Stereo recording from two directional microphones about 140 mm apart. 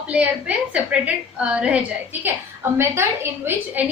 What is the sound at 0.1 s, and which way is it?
A woman's voice, 10° right (ahead or behind).